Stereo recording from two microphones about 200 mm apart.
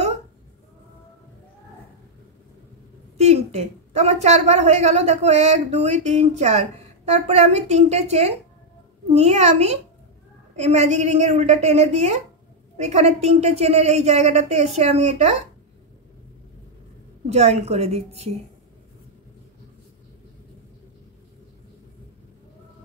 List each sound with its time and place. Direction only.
3.2 s a woman's voice: 30° right (ahead or behind)
17.3 s a woman's voice: 35° right (ahead or behind)